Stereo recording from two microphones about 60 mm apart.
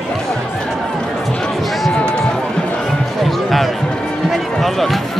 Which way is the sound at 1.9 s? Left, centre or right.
Centre.